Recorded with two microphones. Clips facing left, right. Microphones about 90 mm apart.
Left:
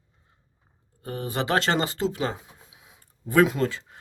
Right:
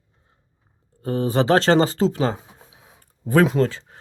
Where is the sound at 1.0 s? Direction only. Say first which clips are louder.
Right 9 dB; 30° right (ahead or behind).